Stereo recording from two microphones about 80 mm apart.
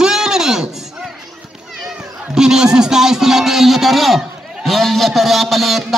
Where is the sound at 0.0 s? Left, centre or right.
Centre.